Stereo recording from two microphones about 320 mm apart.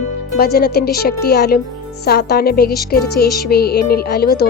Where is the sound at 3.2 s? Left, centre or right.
Centre.